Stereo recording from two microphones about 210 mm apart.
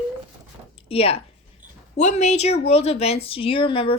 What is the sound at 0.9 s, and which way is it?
A woman's voice, 25° left (ahead or behind).